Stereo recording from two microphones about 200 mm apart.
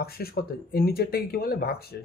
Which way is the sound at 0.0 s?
50° left (ahead or behind).